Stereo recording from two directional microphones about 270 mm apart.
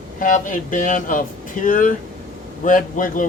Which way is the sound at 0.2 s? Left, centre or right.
Left.